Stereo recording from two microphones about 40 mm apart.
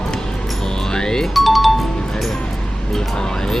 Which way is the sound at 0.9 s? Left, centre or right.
Centre.